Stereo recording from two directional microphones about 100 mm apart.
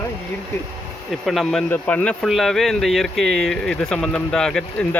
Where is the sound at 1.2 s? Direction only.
Centre (ahead or behind).